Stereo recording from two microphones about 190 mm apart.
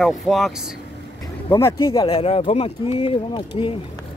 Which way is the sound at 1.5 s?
15° left (ahead or behind).